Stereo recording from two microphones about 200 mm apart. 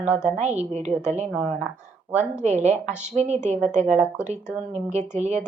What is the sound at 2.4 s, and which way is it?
A woman's voice, 35° right (ahead or behind).